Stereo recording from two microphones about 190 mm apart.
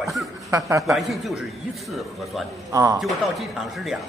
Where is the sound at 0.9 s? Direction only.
Centre (ahead or behind).